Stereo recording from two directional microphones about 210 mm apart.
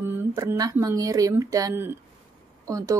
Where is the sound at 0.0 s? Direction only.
10° right (ahead or behind).